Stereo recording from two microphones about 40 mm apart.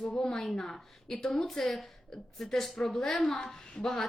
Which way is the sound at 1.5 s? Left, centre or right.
Centre.